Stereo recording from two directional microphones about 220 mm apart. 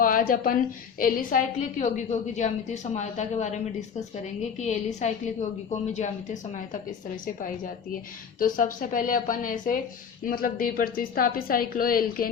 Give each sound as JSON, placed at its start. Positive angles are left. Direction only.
{"t": 0.0, "sound": "a woman's voice", "side_deg": 40}
{"t": 8.4, "sound": "a woman's voice", "side_deg": 40}